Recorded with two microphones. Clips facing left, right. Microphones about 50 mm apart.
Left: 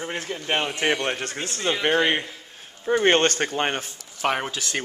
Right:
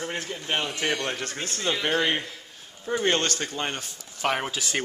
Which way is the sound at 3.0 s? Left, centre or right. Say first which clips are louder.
Left 5 dB; left.